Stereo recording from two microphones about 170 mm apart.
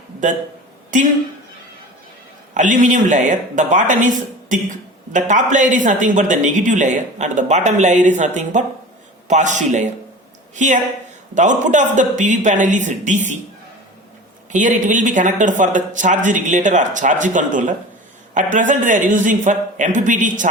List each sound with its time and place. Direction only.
2.6 s speech: 50° right (ahead or behind)
14.5 s speech: 45° right (ahead or behind)